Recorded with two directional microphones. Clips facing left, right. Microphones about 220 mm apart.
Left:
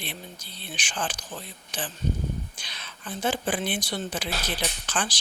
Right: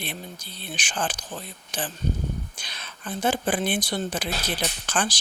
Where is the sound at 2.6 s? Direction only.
50° right (ahead or behind).